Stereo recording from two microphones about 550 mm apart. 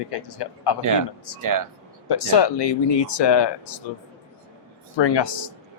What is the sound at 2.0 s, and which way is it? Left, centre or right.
Speech, left.